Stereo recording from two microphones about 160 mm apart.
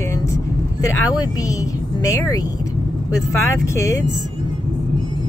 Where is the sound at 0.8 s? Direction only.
20° left (ahead or behind).